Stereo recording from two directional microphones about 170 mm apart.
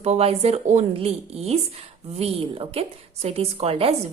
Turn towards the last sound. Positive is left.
turn(degrees=-35)  # may be behind; listen again after turning